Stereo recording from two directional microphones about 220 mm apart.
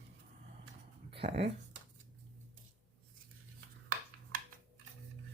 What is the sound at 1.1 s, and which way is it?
Speech, 25° right (ahead or behind).